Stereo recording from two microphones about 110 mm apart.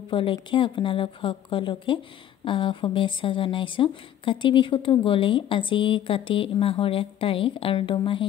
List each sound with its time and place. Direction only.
0.1 s speech: 50° left (ahead or behind)